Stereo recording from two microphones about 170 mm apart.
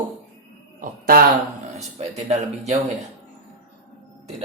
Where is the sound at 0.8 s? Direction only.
60° right (ahead or behind).